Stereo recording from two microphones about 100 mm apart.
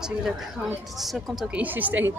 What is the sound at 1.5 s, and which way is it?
Speech, 15° right (ahead or behind).